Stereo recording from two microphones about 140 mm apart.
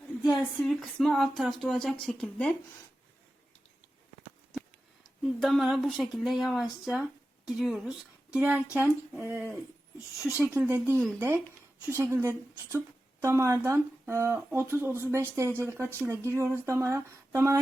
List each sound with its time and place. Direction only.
0.3 s speech: centre (ahead or behind)
5.4 s speech: centre (ahead or behind); by 17.6 s 20° right (ahead or behind)